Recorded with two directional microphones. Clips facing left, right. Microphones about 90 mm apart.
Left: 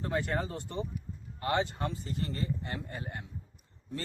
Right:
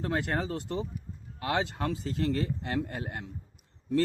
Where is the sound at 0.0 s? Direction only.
70° right (ahead or behind).